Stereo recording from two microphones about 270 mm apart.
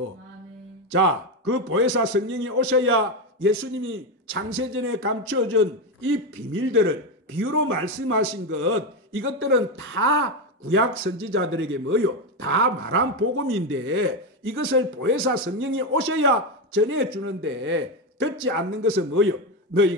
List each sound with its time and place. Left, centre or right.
0.9 s speech: right
7.3 s speech: right